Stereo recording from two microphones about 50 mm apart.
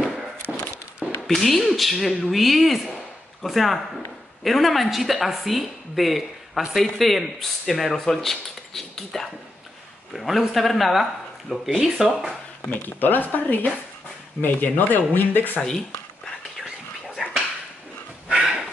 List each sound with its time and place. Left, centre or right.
0.5 s a sound: centre
1.2 s a woman's voice: centre
12.6 s speech: left
17.2 s dog: centre